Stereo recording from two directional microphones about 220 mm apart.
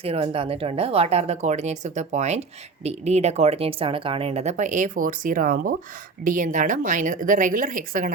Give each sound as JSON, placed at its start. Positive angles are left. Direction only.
{"t": 0.0, "sound": "a woman's voice", "side_deg": -25}